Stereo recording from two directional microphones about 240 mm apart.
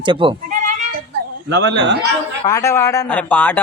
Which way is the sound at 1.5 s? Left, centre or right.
Right.